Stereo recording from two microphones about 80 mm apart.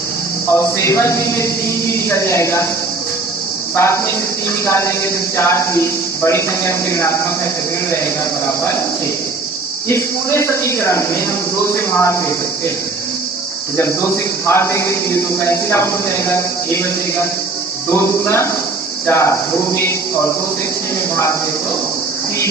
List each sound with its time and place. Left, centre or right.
0.5 s a man's voice: left
3.8 s a man's voice: left
9.9 s a man's voice: left
13.7 s a man's voice: left